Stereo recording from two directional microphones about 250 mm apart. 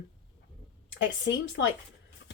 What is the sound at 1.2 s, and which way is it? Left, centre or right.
Speech, left.